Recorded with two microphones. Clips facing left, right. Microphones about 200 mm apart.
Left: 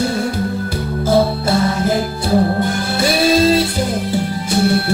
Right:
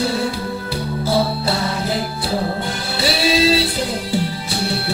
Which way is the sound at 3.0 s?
50° left (ahead or behind).